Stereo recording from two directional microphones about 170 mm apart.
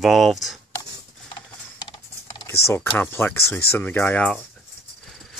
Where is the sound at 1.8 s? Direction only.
25° left (ahead or behind).